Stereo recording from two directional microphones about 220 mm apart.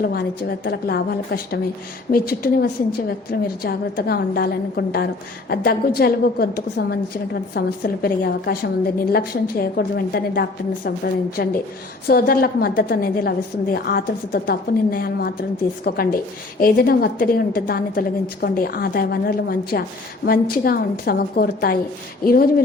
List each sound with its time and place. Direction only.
0.0 s a woman's voice: 45° left (ahead or behind)